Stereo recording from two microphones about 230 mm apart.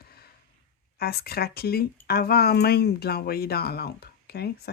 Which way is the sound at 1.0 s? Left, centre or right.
Left.